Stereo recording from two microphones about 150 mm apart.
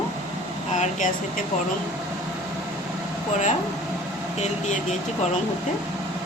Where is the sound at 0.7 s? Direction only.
55° left (ahead or behind).